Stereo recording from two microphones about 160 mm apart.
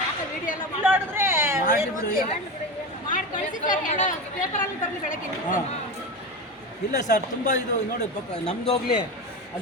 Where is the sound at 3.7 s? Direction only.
50° left (ahead or behind).